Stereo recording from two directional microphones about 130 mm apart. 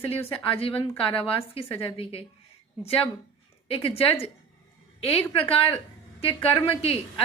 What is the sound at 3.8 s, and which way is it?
A woman's voice, 45° left (ahead or behind).